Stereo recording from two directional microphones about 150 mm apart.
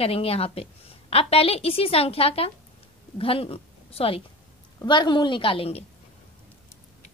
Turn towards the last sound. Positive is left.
turn(degrees=40)  # may be behind; listen again after turning